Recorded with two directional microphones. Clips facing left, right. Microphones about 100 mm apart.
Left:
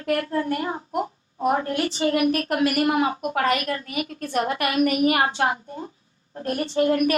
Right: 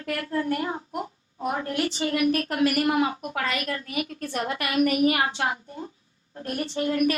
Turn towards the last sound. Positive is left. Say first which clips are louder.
# left 4 dB
turn(degrees=45)  # may be behind; listen again after turning